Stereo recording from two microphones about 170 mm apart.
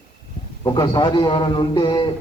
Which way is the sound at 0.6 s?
25° left (ahead or behind).